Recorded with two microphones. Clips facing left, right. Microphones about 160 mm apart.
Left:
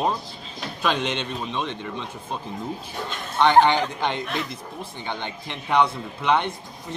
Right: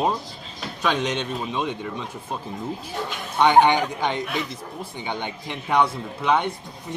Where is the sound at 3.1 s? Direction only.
10° right (ahead or behind).